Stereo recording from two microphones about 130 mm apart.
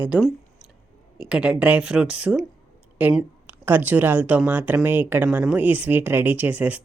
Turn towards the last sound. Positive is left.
turn(degrees=-10)  # may be behind; listen again after turning